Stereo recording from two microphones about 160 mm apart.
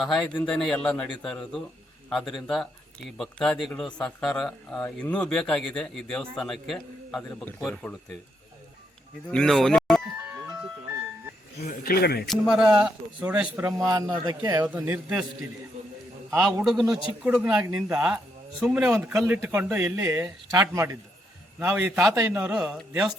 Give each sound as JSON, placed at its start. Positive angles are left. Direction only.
{"t": 0.0, "sound": "speech", "side_deg": 0}
{"t": 9.3, "sound": "music", "side_deg": 5}
{"t": 11.7, "sound": "speech", "side_deg": 65}
{"t": 12.3, "sound": "speech", "side_deg": -5}
{"t": 13.8, "sound": "speech", "side_deg": -25}
{"t": 14.6, "sound": "speech", "side_deg": -10}
{"t": 16.6, "sound": "speech", "side_deg": -5}
{"t": 18.9, "sound": "speech", "side_deg": -15}